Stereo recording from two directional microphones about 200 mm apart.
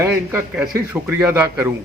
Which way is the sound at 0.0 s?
10° right (ahead or behind).